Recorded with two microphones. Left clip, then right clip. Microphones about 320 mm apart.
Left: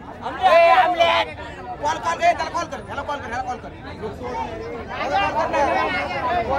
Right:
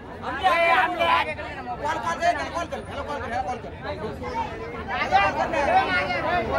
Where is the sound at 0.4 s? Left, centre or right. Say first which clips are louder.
Left 6 dB; left.